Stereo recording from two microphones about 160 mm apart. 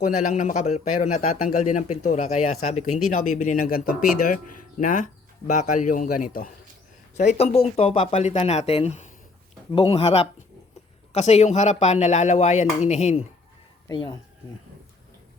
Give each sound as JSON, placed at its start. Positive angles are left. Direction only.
{"t": 0.2, "sound": "speech", "side_deg": 50}
{"t": 7.2, "sound": "speech", "side_deg": 45}
{"t": 13.8, "sound": "speech", "side_deg": 25}